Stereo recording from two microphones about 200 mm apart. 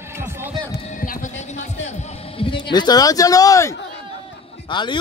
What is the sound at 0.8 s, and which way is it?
Music, 40° left (ahead or behind).